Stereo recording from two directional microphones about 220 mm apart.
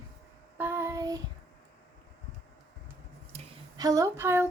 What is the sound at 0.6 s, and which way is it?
Child singing, 10° right (ahead or behind).